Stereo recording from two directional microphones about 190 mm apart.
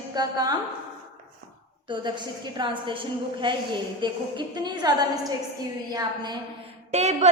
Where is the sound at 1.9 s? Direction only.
25° right (ahead or behind).